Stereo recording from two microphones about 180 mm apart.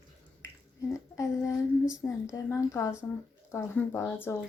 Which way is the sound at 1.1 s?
15° left (ahead or behind).